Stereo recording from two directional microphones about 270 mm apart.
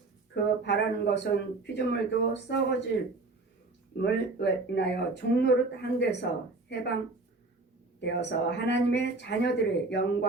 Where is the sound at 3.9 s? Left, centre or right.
Left.